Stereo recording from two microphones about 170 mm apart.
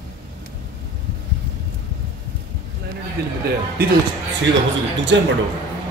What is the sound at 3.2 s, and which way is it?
Speech, 65° right (ahead or behind).